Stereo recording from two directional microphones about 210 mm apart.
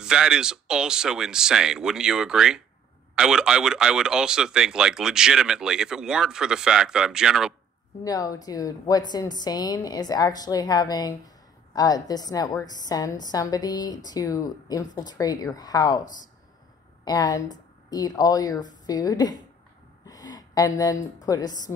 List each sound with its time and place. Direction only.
0.0 s a man's voice: 5° right (ahead or behind)
8.0 s a woman's voice: 15° left (ahead or behind)